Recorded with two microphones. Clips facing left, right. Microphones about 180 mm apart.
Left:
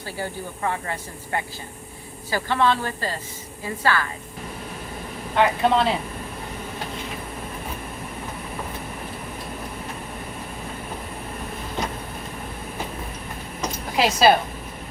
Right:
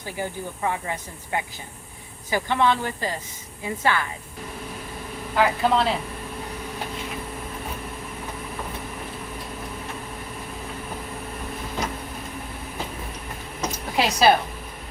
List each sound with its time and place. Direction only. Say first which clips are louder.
0.0 s a woman's voice: even; 15° right (ahead or behind)
5.4 s speech: left 1 dB; centre (ahead or behind)
13.9 s a woman's voice: left 1 dB; centre (ahead or behind)